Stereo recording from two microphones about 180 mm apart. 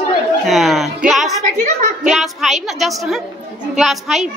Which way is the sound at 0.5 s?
Centre (ahead or behind).